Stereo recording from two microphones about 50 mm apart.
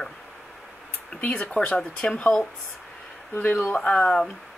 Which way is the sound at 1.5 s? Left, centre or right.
Left.